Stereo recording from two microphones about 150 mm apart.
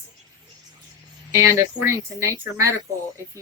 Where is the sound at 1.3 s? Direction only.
20° right (ahead or behind).